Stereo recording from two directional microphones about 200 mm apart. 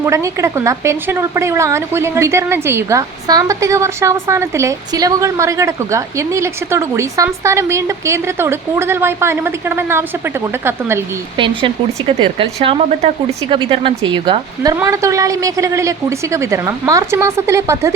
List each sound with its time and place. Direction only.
0.0 s a woman's voice: 15° right (ahead or behind)
11.3 s a woman's voice: 25° right (ahead or behind)